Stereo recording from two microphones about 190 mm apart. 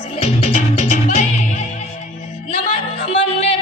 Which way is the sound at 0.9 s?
40° left (ahead or behind).